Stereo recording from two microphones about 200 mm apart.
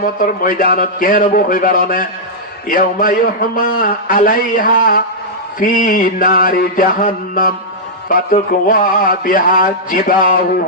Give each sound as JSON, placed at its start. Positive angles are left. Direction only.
{"t": 0.2, "sound": "a man's voice", "side_deg": 45}